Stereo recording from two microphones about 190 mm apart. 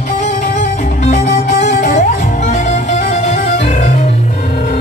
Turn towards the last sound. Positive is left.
turn(degrees=40)  # may be behind; listen again after turning